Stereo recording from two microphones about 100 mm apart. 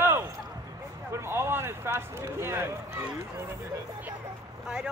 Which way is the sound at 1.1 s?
25° right (ahead or behind).